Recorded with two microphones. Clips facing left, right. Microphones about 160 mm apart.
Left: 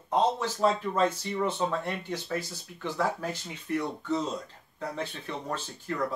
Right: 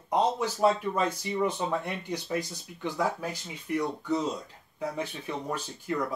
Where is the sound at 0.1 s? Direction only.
10° right (ahead or behind).